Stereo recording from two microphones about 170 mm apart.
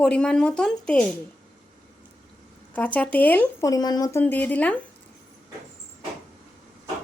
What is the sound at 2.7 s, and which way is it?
Speech, 10° left (ahead or behind).